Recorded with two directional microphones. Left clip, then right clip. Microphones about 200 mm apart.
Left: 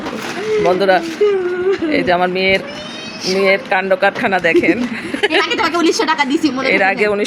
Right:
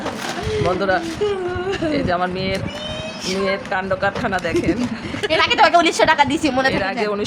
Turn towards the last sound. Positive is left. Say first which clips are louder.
# left 7 dB
turn(degrees=10)  # may be behind; listen again after turning